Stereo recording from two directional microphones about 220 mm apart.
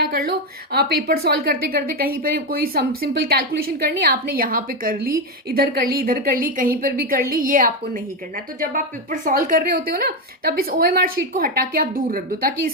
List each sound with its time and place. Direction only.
0.0 s a woman's voice: 45° right (ahead or behind)